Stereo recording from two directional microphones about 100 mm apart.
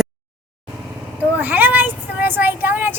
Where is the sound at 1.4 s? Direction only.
20° right (ahead or behind).